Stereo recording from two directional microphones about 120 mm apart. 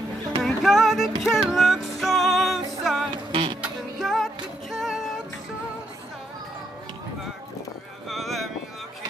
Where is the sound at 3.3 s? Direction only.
55° right (ahead or behind).